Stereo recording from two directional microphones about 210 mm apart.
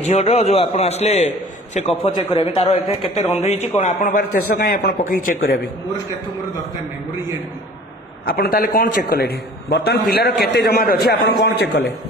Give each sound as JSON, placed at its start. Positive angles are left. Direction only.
{"t": 0.0, "sound": "a man's voice", "side_deg": 30}
{"t": 4.2, "sound": "a man's voice", "side_deg": 45}
{"t": 8.3, "sound": "a man's voice", "side_deg": 45}